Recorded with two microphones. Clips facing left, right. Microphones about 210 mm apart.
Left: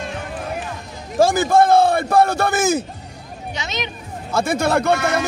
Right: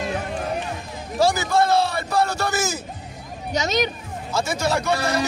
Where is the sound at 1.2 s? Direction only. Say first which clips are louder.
Left 5 dB; 50° left (ahead or behind).